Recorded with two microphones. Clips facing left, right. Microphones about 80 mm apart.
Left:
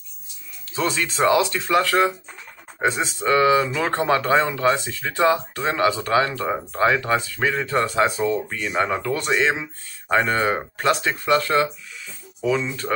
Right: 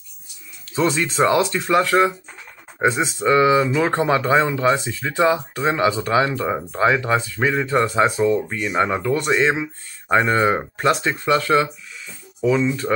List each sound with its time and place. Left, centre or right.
0.7 s speech: right